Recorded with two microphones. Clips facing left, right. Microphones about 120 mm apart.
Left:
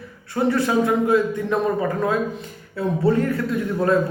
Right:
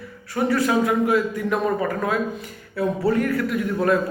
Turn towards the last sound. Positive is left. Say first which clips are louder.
# left 1 dB
turn(degrees=25)  # may be behind; listen again after turning